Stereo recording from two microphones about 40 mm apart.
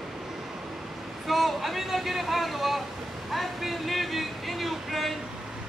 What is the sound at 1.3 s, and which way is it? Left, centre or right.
Speech, centre.